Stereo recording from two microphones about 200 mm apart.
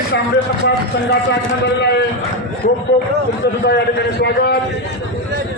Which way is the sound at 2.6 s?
40° left (ahead or behind).